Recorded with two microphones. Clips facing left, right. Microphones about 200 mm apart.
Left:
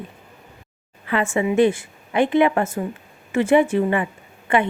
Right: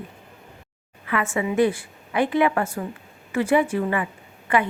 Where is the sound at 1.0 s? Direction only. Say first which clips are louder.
Left 4 dB; 30° left (ahead or behind).